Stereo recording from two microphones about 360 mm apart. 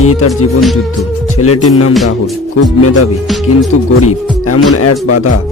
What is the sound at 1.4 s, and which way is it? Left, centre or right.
Speech, left.